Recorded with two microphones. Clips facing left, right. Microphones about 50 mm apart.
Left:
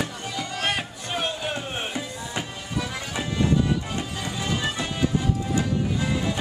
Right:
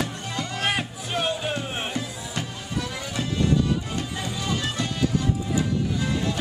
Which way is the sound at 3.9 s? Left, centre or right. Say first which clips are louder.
Even; centre.